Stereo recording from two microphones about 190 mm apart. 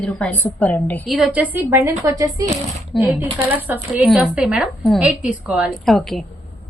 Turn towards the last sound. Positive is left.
turn(degrees=0)  # may be behind; listen again after turning